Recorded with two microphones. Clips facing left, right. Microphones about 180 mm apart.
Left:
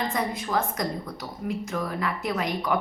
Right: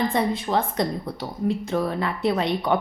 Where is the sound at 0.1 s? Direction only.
30° right (ahead or behind).